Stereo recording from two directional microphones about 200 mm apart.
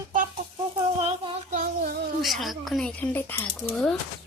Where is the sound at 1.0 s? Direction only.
30° right (ahead or behind).